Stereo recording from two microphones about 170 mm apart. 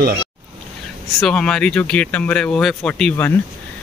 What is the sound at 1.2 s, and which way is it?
Speech, 5° left (ahead or behind).